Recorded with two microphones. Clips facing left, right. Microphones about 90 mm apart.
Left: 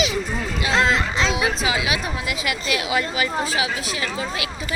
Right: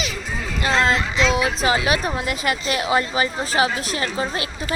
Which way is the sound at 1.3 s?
45° right (ahead or behind).